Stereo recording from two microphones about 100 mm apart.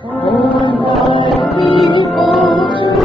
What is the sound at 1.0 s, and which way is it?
Music, 55° left (ahead or behind).